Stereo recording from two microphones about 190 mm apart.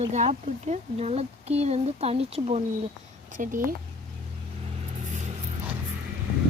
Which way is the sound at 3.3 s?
45° right (ahead or behind).